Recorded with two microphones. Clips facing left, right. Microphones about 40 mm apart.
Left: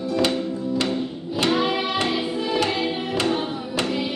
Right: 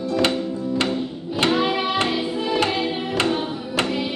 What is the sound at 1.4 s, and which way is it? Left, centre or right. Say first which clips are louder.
Music: right 1 dB; centre.